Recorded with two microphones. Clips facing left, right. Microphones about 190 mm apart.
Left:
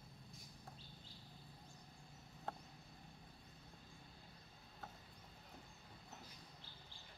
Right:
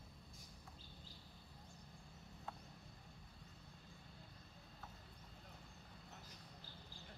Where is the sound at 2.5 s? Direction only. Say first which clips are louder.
Left 4 dB; 60° left (ahead or behind).